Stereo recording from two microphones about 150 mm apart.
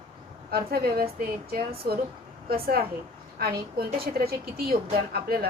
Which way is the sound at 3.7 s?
90° right.